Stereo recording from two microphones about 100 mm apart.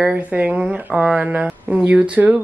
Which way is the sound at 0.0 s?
15° right (ahead or behind).